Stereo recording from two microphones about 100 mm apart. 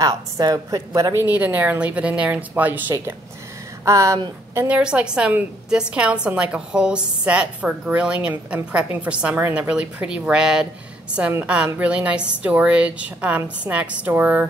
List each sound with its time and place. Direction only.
0.0 s a woman's voice: 40° right (ahead or behind)
1.1 s a woman's voice: 20° right (ahead or behind)
3.8 s a woman's voice: 30° right (ahead or behind)
4.6 s a woman's voice: 10° right (ahead or behind)